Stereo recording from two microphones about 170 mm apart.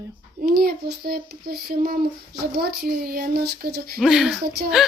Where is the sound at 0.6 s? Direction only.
65° right (ahead or behind).